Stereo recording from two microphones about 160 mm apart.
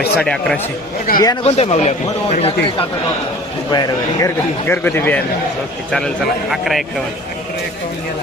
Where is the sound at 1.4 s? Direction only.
40° left (ahead or behind).